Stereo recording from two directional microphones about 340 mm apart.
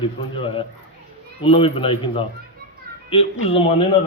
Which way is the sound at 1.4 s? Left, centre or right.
Centre.